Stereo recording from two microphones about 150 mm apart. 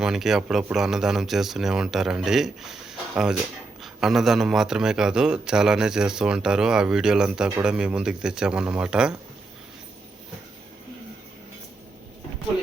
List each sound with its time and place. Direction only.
0.0 s a man's voice: 5° right (ahead or behind)